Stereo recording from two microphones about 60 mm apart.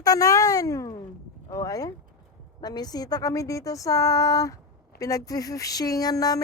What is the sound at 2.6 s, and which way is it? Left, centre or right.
Speech, left.